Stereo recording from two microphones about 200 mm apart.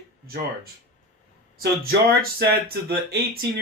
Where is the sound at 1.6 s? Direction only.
50° right (ahead or behind).